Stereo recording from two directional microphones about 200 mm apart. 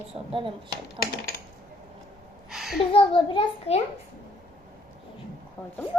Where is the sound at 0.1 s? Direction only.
25° right (ahead or behind).